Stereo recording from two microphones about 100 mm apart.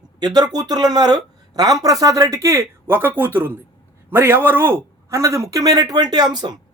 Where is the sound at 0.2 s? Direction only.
45° right (ahead or behind).